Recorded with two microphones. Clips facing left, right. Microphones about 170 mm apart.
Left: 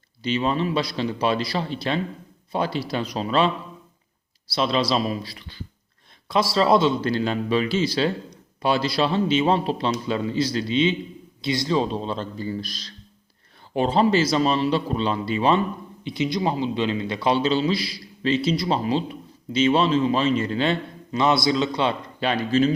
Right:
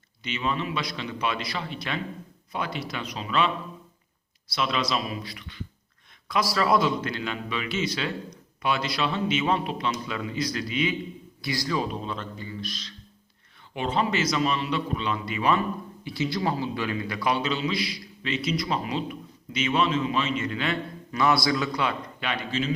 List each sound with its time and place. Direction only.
0.2 s a man's voice: 35° left (ahead or behind)
4.5 s a man's voice: 30° left (ahead or behind)